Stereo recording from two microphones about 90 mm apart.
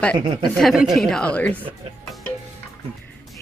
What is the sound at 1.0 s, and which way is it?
Speech, 10° left (ahead or behind).